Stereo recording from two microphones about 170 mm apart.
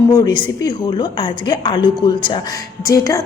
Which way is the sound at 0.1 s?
25° left (ahead or behind).